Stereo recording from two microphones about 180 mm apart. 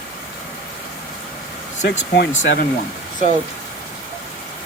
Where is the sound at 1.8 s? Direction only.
65° left (ahead or behind).